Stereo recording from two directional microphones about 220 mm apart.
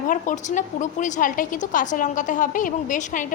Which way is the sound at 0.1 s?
35° left (ahead or behind).